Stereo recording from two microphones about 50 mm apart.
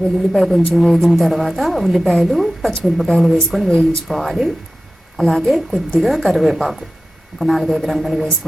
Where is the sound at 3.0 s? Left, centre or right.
Centre.